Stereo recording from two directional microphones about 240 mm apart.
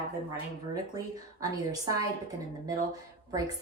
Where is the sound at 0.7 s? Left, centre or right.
Centre.